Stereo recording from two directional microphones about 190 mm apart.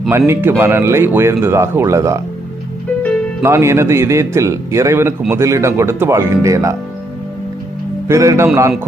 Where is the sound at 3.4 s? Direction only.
15° right (ahead or behind).